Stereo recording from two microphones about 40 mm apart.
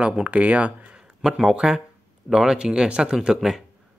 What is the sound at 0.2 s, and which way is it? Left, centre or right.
Speech, right.